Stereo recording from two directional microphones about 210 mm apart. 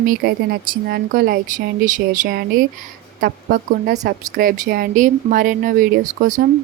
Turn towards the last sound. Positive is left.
turn(degrees=-40)  # may be behind; listen again after turning